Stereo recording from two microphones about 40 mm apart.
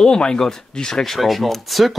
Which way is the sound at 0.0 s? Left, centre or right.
Centre.